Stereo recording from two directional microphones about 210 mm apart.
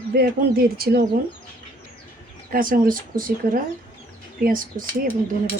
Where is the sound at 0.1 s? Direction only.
45° right (ahead or behind).